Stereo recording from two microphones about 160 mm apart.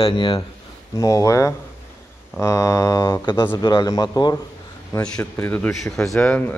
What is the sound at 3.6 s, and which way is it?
Speech, 25° left (ahead or behind).